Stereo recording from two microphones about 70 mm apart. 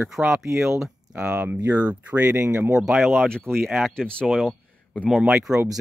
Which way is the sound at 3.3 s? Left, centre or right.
Centre.